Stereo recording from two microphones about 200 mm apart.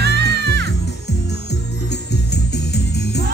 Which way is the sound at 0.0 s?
55° right (ahead or behind).